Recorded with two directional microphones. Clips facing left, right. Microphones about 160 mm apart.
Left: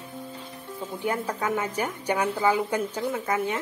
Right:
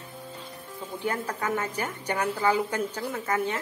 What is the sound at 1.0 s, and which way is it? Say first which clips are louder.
A woman's voice: left 2 dB; 10° left (ahead or behind).